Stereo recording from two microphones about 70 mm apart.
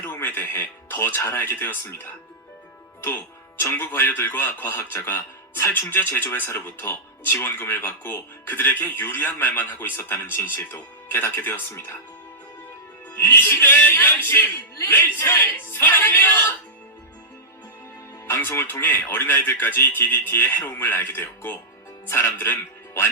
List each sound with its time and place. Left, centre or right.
0.0 s speech: left
3.6 s speech: left
13.1 s speech: left
18.3 s speech: left